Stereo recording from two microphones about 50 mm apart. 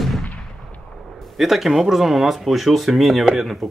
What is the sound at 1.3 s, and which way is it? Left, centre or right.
Speech, centre.